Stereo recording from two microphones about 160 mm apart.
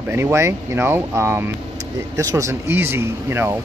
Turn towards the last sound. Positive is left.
turn(degrees=-15)  # may be behind; listen again after turning